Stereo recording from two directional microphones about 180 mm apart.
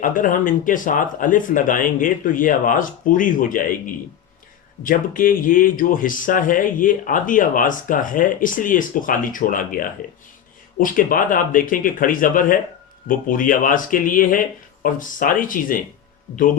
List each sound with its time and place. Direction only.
0.0 s speech: 50° left (ahead or behind)